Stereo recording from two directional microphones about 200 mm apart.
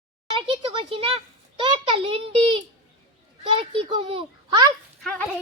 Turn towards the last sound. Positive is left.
turn(degrees=5)  # may be behind; listen again after turning